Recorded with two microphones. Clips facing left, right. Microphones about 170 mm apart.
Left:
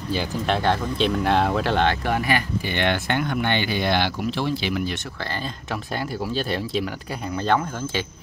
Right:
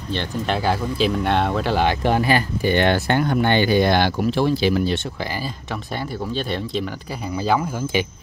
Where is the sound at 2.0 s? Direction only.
30° right (ahead or behind).